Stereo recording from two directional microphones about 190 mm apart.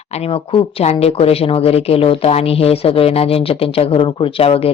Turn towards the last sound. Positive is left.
turn(degrees=30)  # may be behind; listen again after turning